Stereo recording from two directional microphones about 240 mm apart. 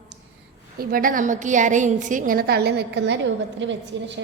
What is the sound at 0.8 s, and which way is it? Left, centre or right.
A woman's voice, right.